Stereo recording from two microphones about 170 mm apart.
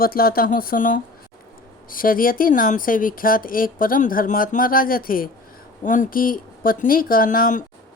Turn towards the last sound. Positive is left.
turn(degrees=50)  # may be behind; listen again after turning